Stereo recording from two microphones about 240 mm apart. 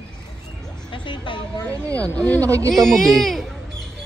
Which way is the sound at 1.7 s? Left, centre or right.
Centre.